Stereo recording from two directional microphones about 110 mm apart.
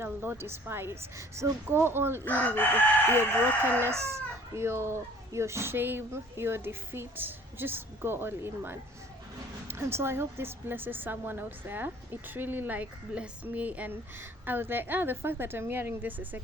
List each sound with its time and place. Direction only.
0.0 s a woman's voice: 20° right (ahead or behind)
2.2 s chicken: 15° left (ahead or behind)
3.2 s a woman's voice: 20° right (ahead or behind)